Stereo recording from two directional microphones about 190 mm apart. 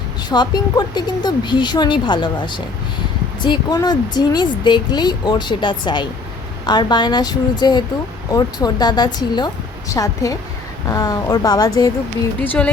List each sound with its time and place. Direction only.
0.3 s a woman's voice: 20° left (ahead or behind)
12.4 s a woman's voice: 10° left (ahead or behind)